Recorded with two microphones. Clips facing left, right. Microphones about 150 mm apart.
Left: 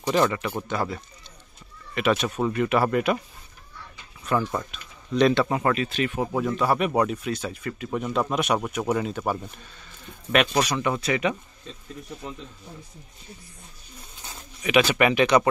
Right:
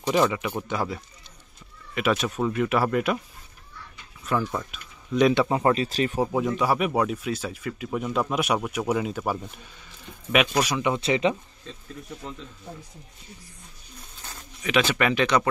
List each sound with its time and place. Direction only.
0.1 s speech: 10° right (ahead or behind)
4.2 s speech: centre (ahead or behind)
5.5 s speech: 25° right (ahead or behind)
6.2 s speech: 15° right (ahead or behind)
11.0 s speech: 25° right (ahead or behind)
14.2 s speech: 10° left (ahead or behind)